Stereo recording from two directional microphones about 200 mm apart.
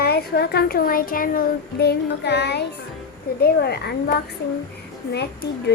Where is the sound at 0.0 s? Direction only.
50° left (ahead or behind).